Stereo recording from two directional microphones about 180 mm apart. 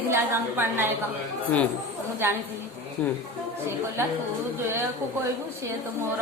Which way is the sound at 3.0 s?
5° left (ahead or behind).